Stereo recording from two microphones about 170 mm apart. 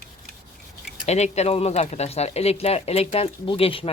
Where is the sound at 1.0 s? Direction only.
40° left (ahead or behind).